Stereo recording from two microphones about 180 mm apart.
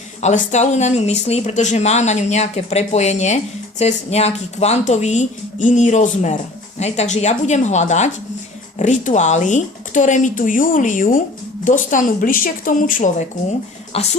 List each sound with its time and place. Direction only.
0.2 s speech: 40° left (ahead or behind)
13.9 s speech: 35° left (ahead or behind)